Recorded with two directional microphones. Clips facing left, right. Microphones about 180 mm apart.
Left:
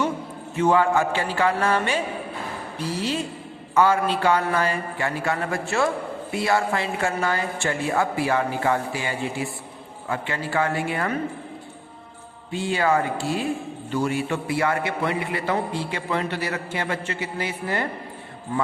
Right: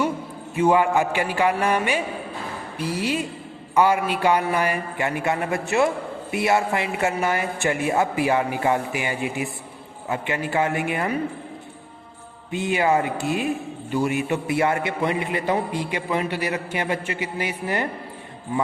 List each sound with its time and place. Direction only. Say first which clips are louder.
0.5 s a man's voice: right 1 dB; 15° right (ahead or behind)
12.5 s a man's voice: right 1 dB; 20° right (ahead or behind)